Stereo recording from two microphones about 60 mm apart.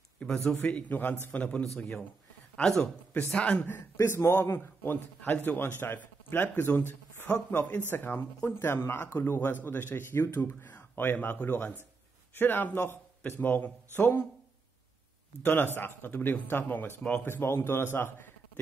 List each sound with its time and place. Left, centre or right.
0.2 s a man's voice: centre
1.8 s a man's voice: centre
2.8 s a man's voice: left
3.3 s speech: centre
4.1 s a man's voice: left
8.4 s speech: left
8.6 s a man's voice: left
10.6 s a man's voice: left
15.4 s a man's voice: left
17.0 s a man's voice: left
17.3 s a man's voice: left